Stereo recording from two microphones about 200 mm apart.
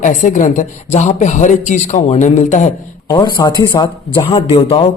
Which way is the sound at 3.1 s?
20° left (ahead or behind).